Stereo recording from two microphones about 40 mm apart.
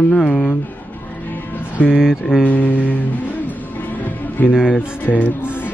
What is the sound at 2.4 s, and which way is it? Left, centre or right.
Music, left.